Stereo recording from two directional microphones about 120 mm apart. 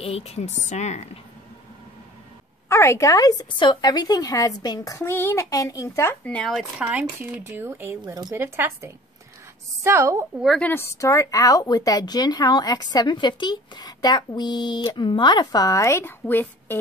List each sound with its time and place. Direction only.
0.0 s a woman's voice: 55° left (ahead or behind)
2.7 s a woman's voice: 25° left (ahead or behind)
6.3 s speech: centre (ahead or behind)
7.2 s speech: 20° right (ahead or behind)
8.0 s speech: 35° right (ahead or behind)
8.4 s a woman's voice: 20° right (ahead or behind)
10.6 s a woman's voice: 20° left (ahead or behind)